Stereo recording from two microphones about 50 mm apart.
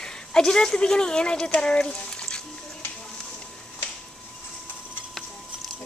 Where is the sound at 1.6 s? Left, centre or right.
Centre.